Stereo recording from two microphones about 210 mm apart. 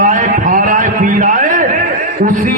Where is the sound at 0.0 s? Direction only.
40° right (ahead or behind).